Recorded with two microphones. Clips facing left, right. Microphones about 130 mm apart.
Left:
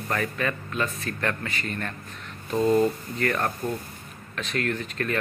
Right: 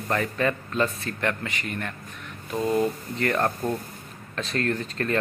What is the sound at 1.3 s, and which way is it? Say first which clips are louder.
Speech: right 1 dB; 15° right (ahead or behind).